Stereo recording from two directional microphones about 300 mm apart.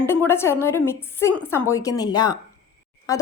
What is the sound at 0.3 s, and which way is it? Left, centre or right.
A woman's voice, centre.